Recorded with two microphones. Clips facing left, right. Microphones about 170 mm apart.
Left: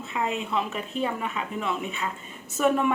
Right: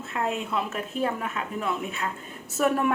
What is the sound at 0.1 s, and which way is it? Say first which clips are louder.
A woman's voice: even; centre (ahead or behind).